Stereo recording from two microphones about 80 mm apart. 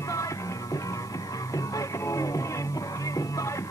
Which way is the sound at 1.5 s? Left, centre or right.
Left.